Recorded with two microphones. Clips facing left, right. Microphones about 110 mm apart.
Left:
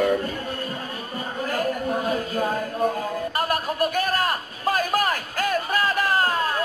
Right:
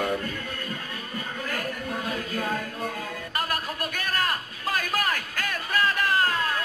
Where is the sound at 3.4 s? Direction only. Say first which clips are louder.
Left 4 dB; 25° left (ahead or behind).